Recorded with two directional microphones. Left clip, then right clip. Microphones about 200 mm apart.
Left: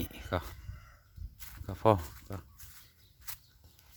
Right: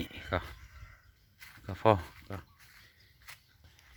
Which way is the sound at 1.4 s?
5° left (ahead or behind).